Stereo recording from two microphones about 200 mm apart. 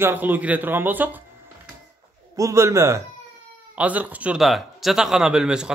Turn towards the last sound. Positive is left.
turn(degrees=-5)  # may be behind; listen again after turning